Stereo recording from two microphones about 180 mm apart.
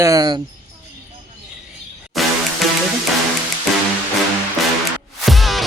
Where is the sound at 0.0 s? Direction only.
20° right (ahead or behind).